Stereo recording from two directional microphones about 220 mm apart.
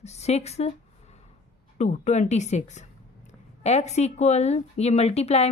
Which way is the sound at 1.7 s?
30° left (ahead or behind).